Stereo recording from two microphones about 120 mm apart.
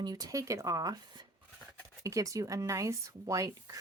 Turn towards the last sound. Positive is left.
turn(degrees=-25)  # may be behind; listen again after turning